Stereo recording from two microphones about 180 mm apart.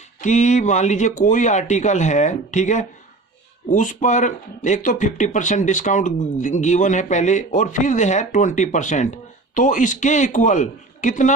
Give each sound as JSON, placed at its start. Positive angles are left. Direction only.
{"t": 0.2, "sound": "speech", "side_deg": 40}